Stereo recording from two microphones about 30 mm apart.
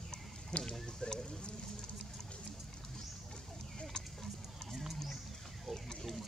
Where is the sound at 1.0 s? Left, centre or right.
Centre.